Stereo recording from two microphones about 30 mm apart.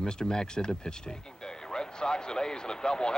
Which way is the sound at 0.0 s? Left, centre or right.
Left.